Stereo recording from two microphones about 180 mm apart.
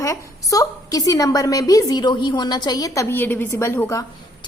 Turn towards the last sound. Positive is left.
turn(degrees=15)  # may be behind; listen again after turning